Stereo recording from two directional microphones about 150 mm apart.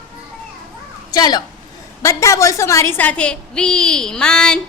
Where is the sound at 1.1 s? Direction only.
25° left (ahead or behind); by 4.6 s 5° left (ahead or behind).